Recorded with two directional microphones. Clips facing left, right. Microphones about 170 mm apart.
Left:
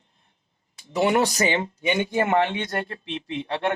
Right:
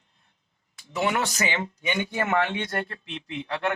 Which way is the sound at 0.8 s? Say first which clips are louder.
Left 5 dB; 35° left (ahead or behind).